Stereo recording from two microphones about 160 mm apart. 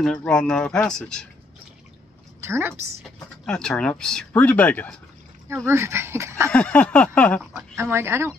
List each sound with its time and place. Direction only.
0.0 s speech: 5° left (ahead or behind)
2.4 s a woman's voice: 15° right (ahead or behind)
3.0 s speech: 5° left (ahead or behind)
5.7 s speech: 15° right (ahead or behind)
6.5 s speech: 10° left (ahead or behind)
7.7 s speech: 15° right (ahead or behind)